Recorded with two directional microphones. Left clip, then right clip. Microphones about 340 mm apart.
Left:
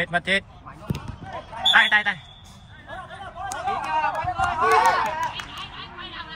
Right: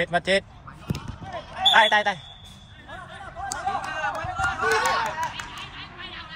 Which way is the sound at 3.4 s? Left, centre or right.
Centre.